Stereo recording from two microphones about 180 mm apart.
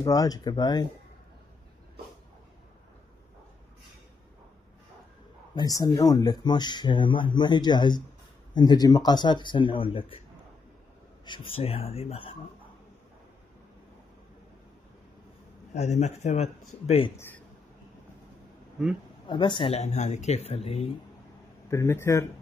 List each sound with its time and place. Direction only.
0.0 s speech: 20° left (ahead or behind)
5.5 s speech: 20° left (ahead or behind)
11.2 s speech: 30° left (ahead or behind)
15.7 s speech: 40° left (ahead or behind)
19.2 s speech: 25° left (ahead or behind)
21.6 s speech: 15° left (ahead or behind)